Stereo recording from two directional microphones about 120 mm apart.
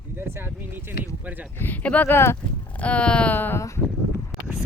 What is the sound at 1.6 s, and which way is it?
Speech, 15° left (ahead or behind).